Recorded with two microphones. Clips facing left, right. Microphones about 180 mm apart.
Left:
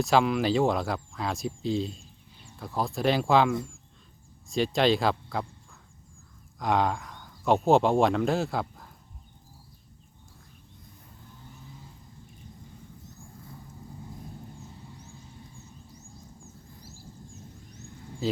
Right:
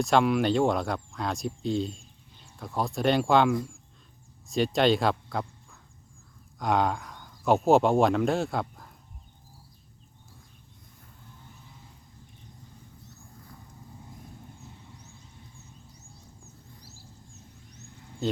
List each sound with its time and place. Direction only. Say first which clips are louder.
0.0 s speech: right 1 dB; centre (ahead or behind)
6.6 s speech: even; centre (ahead or behind)
18.2 s speech: even; centre (ahead or behind)